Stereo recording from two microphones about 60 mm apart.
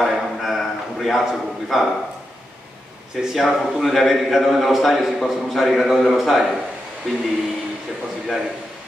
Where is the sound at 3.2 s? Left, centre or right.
Centre.